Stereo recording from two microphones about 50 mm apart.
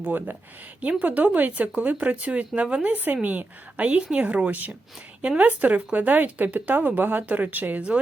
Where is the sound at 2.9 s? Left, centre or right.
Right.